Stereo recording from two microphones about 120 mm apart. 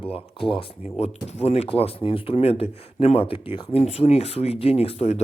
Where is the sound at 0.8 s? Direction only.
65° left (ahead or behind).